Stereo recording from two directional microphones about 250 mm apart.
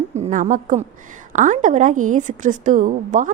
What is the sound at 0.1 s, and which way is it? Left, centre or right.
A woman's voice, right.